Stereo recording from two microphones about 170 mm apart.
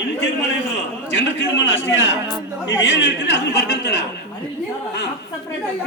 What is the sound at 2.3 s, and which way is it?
Speech, 20° left (ahead or behind).